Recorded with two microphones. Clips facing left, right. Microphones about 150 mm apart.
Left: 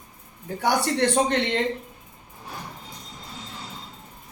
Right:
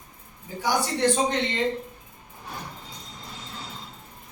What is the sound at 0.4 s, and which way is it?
Speech, 65° left (ahead or behind).